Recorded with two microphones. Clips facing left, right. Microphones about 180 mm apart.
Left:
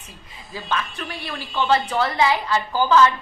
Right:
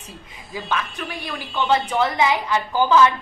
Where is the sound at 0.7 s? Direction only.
15° right (ahead or behind).